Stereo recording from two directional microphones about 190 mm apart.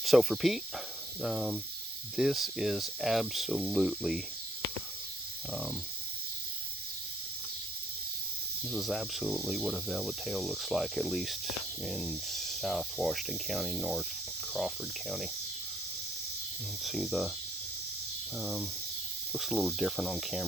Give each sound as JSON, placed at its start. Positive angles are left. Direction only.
{"t": 0.0, "sound": "speech", "side_deg": 0}
{"t": 5.5, "sound": "speech", "side_deg": 0}
{"t": 8.7, "sound": "speech", "side_deg": 0}
{"t": 16.8, "sound": "speech", "side_deg": 0}
{"t": 18.3, "sound": "speech", "side_deg": 0}